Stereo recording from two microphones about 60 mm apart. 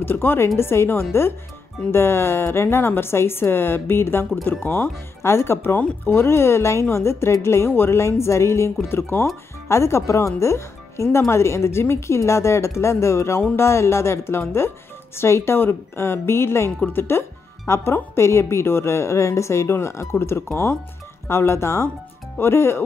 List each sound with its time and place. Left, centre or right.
0.0 s a woman's voice: left